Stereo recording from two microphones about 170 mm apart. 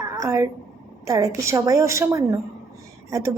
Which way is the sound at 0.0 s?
20° right (ahead or behind).